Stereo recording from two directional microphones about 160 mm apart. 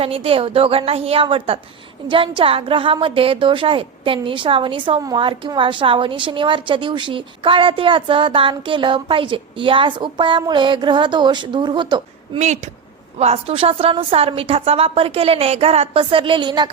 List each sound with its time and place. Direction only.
0.0 s a woman's voice: 35° right (ahead or behind)
13.1 s a woman's voice: 40° right (ahead or behind)